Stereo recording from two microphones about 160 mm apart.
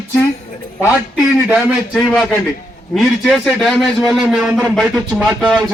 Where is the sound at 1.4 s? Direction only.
5° right (ahead or behind).